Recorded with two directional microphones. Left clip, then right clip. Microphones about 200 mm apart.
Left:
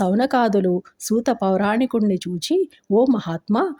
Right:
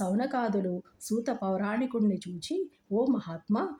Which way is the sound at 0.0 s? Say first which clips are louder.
Left 12 dB; 40° left (ahead or behind).